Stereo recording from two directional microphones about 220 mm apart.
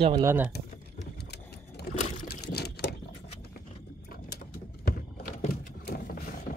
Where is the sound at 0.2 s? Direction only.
10° right (ahead or behind).